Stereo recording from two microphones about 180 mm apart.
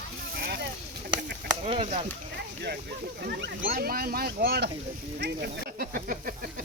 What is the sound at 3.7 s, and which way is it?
Speech, 55° right (ahead or behind).